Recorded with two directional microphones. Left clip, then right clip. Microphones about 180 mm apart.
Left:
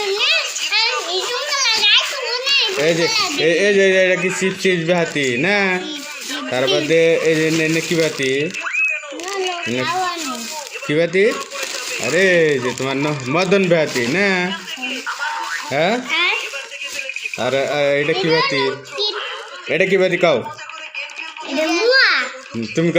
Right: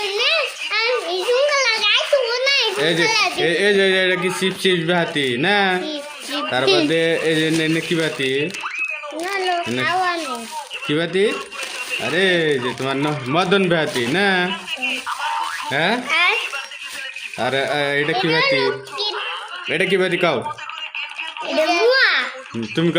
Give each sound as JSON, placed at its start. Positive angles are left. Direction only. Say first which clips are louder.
{"t": 0.1, "sound": "children playing", "louder": "left 2 dB", "side_deg": -50}
{"t": 3.0, "sound": "speech", "louder": "right 1 dB", "side_deg": -55}
{"t": 3.4, "sound": "speech", "louder": "left 5 dB", "side_deg": 0}
{"t": 9.8, "sound": "a sound", "louder": "right 1 dB", "side_deg": -45}
{"t": 10.8, "sound": "speech", "louder": "left 3 dB", "side_deg": -5}
{"t": 13.7, "sound": "a sound", "louder": "left 3 dB", "side_deg": 0}
{"t": 16.0, "sound": "stir", "louder": "right 1 dB", "side_deg": -40}
{"t": 17.4, "sound": "speech", "louder": "left 2 dB", "side_deg": -5}
{"t": 18.3, "sound": "a child's voice", "louder": "even", "side_deg": -45}
{"t": 19.6, "sound": "speech", "louder": "left 3 dB", "side_deg": -5}
{"t": 21.8, "sound": "babbling", "louder": "left 4 dB", "side_deg": -15}
{"t": 22.7, "sound": "speech", "louder": "left 1 dB", "side_deg": -10}